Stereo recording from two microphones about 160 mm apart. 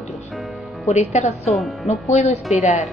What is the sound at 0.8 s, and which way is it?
Speech, 45° left (ahead or behind).